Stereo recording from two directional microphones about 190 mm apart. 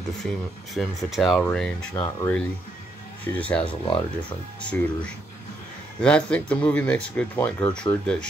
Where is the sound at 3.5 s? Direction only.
25° left (ahead or behind).